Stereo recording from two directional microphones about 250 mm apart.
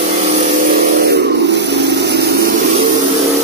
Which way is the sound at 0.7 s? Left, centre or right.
Right.